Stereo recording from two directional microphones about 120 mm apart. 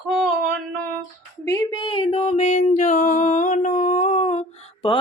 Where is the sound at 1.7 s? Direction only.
45° left (ahead or behind); by 4.4 s 60° left (ahead or behind).